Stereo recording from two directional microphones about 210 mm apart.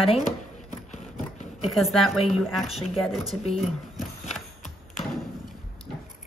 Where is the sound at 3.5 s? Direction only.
Centre (ahead or behind).